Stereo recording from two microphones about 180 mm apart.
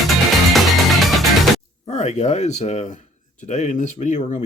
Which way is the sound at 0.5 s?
Centre (ahead or behind).